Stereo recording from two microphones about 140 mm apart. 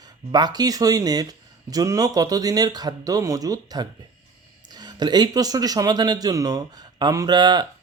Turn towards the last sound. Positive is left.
turn(degrees=-30)  # may be behind; listen again after turning